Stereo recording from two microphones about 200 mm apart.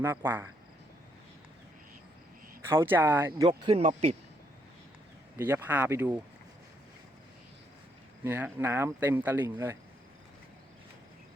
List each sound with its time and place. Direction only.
0.0 s speech: 10° right (ahead or behind)
2.6 s speech: 10° right (ahead or behind); by 4.2 s 30° right (ahead or behind)
5.4 s speech: 10° right (ahead or behind)
8.2 s speech: 10° right (ahead or behind)